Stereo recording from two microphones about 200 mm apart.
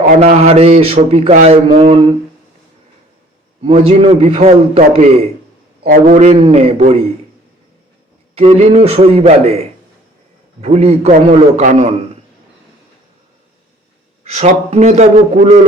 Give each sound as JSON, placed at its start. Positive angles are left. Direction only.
{"t": 0.1, "sound": "a man's voice", "side_deg": -35}
{"t": 3.6, "sound": "a man's voice", "side_deg": -30}
{"t": 5.8, "sound": "a man's voice", "side_deg": -40}
{"t": 8.4, "sound": "a man's voice", "side_deg": -30}
{"t": 10.6, "sound": "a man's voice", "side_deg": -30}
{"t": 14.3, "sound": "a man's voice", "side_deg": -35}